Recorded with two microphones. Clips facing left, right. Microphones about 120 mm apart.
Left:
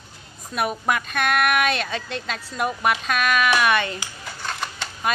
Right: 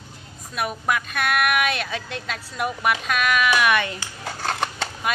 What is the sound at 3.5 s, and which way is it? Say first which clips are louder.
Speech: even; 30° left (ahead or behind).